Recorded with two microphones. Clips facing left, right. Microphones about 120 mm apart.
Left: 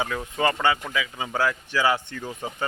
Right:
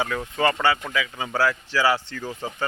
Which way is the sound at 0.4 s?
20° left (ahead or behind).